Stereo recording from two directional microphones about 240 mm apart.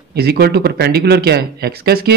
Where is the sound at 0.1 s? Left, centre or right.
Right.